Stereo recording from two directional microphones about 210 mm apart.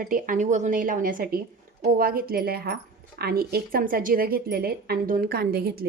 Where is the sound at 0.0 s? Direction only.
40° right (ahead or behind).